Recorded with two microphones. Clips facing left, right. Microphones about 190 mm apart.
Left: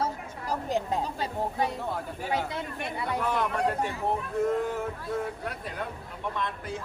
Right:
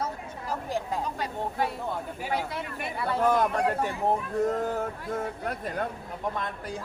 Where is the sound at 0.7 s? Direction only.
20° left (ahead or behind).